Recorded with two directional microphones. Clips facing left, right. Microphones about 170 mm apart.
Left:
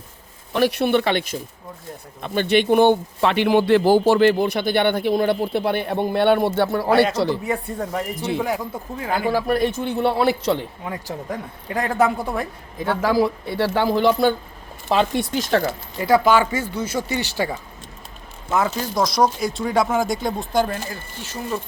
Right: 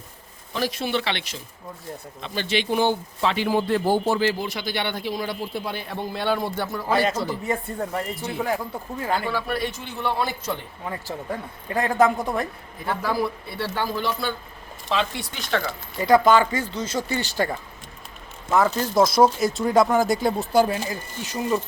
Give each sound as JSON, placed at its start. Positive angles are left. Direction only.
{"t": 0.5, "sound": "a man's voice", "side_deg": 65}
{"t": 8.4, "sound": "speech", "side_deg": 10}
{"t": 9.3, "sound": "speech", "side_deg": 45}
{"t": 10.1, "sound": "a man's voice", "side_deg": 65}
{"t": 10.8, "sound": "speech", "side_deg": 10}
{"t": 12.8, "sound": "a man's voice", "side_deg": 90}
{"t": 16.0, "sound": "speech", "side_deg": 5}
{"t": 18.9, "sound": "speech", "side_deg": -5}